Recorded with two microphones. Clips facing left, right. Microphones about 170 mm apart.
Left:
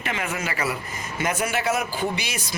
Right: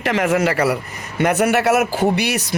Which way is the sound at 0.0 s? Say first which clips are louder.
Right 11 dB; 75° right (ahead or behind).